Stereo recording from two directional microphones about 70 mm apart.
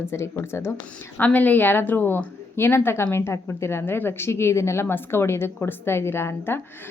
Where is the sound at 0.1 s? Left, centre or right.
Left.